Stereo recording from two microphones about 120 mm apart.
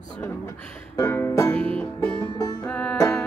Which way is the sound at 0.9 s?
20° left (ahead or behind).